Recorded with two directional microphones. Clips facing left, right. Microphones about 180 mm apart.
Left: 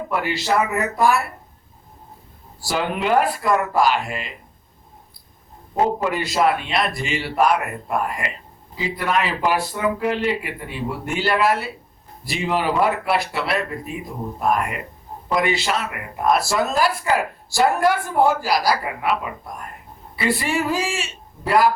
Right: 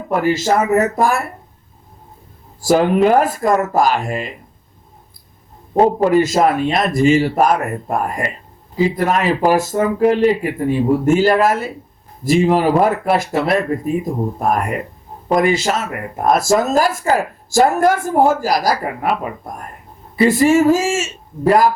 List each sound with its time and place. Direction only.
0.1 s speech: 45° right (ahead or behind)
2.6 s speech: 40° right (ahead or behind)
5.7 s speech: 35° right (ahead or behind)